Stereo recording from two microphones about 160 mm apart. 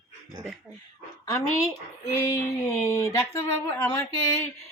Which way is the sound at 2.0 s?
15° left (ahead or behind).